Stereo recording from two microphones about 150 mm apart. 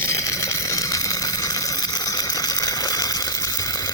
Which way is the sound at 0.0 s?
20° left (ahead or behind).